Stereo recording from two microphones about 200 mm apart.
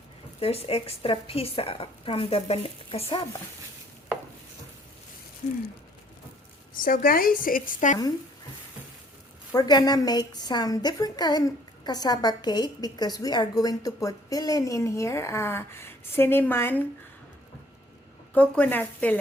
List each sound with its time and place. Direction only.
0.3 s a woman's voice: 30° left (ahead or behind)
6.8 s a woman's voice: 45° left (ahead or behind)
9.5 s a woman's voice: 20° left (ahead or behind)
18.3 s a woman's voice: 5° left (ahead or behind)